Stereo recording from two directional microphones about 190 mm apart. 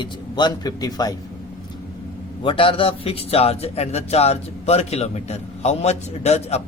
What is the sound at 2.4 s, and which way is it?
A man's voice, 25° left (ahead or behind).